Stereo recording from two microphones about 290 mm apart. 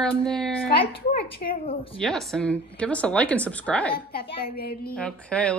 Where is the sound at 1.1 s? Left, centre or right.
Left.